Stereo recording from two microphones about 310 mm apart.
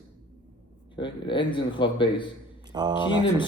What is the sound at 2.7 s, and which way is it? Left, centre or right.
Speech, centre.